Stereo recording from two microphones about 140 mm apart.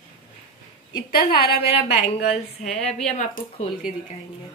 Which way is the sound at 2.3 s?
50° left (ahead or behind).